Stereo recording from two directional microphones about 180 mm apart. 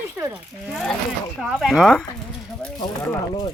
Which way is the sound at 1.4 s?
5° right (ahead or behind).